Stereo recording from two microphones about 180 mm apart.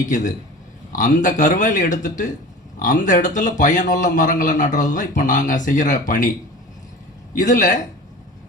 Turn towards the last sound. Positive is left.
turn(degrees=45)  # may be behind; listen again after turning